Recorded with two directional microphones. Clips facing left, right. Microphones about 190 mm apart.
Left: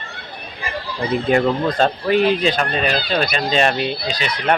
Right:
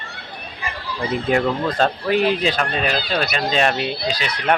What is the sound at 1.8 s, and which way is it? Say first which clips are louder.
Speech: left 1 dB; 5° right (ahead or behind).